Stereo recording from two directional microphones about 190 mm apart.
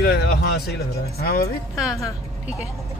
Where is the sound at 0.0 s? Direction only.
60° left (ahead or behind).